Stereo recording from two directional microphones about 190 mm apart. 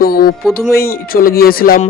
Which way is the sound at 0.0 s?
50° left (ahead or behind).